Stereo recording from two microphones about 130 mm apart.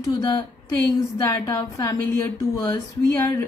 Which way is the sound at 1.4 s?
25° left (ahead or behind).